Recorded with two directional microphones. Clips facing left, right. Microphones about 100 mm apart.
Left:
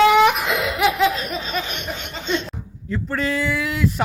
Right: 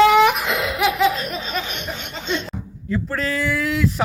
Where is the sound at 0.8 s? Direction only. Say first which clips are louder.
Even; centre (ahead or behind).